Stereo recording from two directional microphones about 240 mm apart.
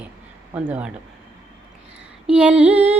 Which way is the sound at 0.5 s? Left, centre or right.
Centre.